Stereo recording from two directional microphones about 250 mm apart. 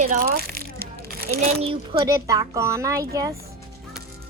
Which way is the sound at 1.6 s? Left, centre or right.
Right.